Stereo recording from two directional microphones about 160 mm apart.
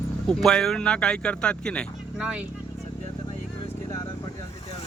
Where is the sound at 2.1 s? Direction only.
5° right (ahead or behind).